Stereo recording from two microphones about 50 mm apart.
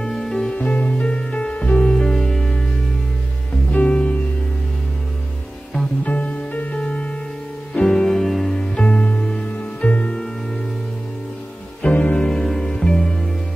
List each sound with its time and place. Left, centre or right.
0.0 s music: centre
3.7 s music: left
6.0 s music: left
7.8 s music: centre
8.5 s music: centre
11.9 s music: left
12.2 s music: centre